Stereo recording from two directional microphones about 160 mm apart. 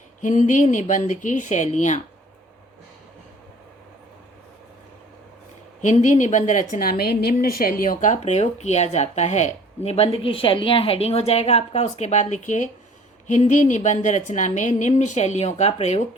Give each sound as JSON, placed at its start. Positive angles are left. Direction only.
{"t": 0.2, "sound": "speech", "side_deg": 50}
{"t": 5.8, "sound": "speech", "side_deg": 50}
{"t": 7.4, "sound": "speech", "side_deg": 70}